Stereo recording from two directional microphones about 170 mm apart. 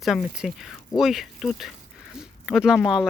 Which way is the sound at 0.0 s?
Centre (ahead or behind).